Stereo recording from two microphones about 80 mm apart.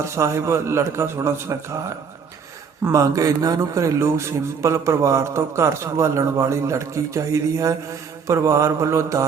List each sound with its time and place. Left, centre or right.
0.0 s a man's voice: right
2.9 s a man's voice: right